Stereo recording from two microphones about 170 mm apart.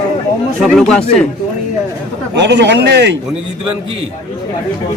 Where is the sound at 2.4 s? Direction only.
90° right.